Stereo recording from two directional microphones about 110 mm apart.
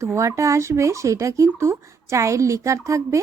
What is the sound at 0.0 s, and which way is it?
Speech, 25° right (ahead or behind).